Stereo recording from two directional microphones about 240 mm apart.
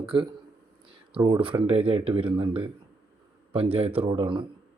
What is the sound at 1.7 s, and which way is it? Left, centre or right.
Speech, right.